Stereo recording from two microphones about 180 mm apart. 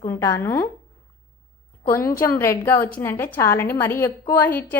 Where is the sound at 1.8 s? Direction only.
15° left (ahead or behind).